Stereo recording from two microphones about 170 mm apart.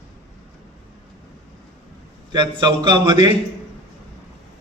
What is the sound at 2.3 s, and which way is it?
A man's voice, 25° right (ahead or behind).